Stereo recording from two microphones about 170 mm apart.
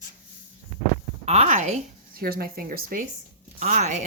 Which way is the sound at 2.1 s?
60° right (ahead or behind).